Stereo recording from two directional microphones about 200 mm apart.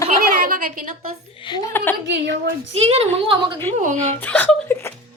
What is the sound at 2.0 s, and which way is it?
Speech, 60° right (ahead or behind).